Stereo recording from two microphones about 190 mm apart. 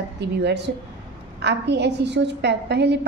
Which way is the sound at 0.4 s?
60° right (ahead or behind).